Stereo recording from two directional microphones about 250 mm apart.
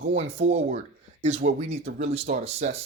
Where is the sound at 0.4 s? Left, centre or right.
Right.